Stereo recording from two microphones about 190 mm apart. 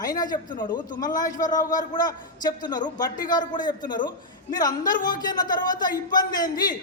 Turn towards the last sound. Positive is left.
turn(degrees=20)  # may be behind; listen again after turning